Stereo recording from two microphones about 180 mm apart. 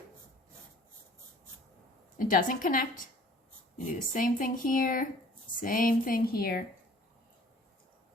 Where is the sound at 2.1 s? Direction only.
50° left (ahead or behind).